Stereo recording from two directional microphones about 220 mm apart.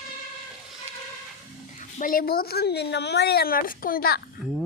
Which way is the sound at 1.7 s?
40° left (ahead or behind).